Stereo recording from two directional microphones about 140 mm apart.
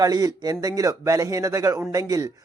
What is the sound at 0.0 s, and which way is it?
A man's voice, 25° right (ahead or behind).